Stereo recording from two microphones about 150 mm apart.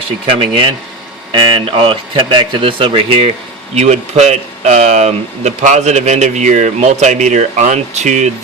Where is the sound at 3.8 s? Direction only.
50° right (ahead or behind).